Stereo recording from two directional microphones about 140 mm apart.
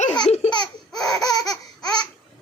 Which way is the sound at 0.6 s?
5° left (ahead or behind).